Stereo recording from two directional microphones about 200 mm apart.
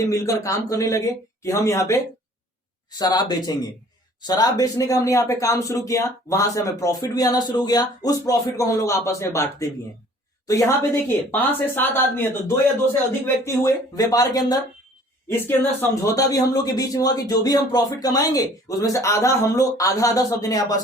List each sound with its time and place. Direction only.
0.1 s speech: 15° left (ahead or behind)
3.0 s a woman's voice: 20° left (ahead or behind)